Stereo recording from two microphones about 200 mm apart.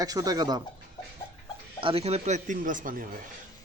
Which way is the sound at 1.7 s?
25° right (ahead or behind).